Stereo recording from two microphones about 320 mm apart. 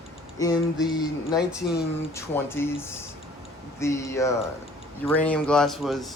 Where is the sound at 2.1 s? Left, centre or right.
Centre.